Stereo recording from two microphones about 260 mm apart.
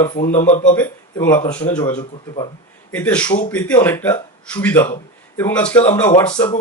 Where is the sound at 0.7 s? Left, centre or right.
Centre.